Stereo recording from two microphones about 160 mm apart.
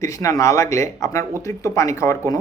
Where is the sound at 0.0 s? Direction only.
20° left (ahead or behind).